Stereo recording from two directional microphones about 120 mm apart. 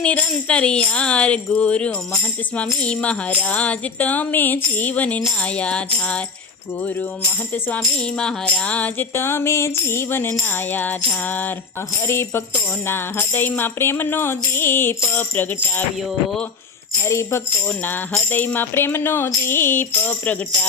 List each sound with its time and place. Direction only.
0.0 s speech: 10° left (ahead or behind)
7.8 s music: 5° left (ahead or behind)
10.7 s speech: 15° left (ahead or behind)
12.0 s music: 20° left (ahead or behind)
17.0 s music: 20° left (ahead or behind)
18.3 s speech: 15° left (ahead or behind)